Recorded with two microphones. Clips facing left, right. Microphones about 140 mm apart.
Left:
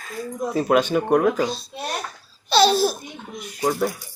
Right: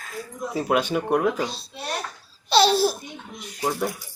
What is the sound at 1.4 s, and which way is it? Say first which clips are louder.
A child's voice: left 5 dB; 30° right (ahead or behind).